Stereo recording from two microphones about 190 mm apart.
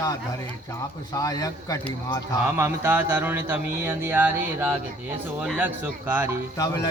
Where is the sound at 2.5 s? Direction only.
10° right (ahead or behind).